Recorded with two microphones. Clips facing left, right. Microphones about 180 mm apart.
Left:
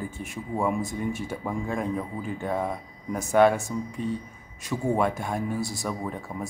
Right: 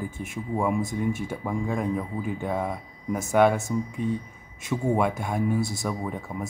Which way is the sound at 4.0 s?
15° right (ahead or behind).